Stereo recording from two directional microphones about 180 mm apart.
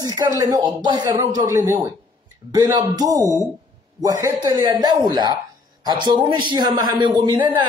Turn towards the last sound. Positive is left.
turn(degrees=-25)  # may be behind; listen again after turning